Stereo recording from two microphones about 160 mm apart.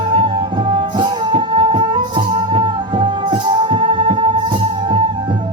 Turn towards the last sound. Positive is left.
turn(degrees=-30)  # may be behind; listen again after turning